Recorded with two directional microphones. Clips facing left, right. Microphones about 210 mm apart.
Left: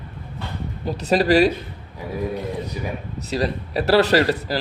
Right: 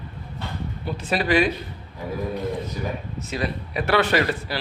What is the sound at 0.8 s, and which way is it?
Speech, 40° left (ahead or behind).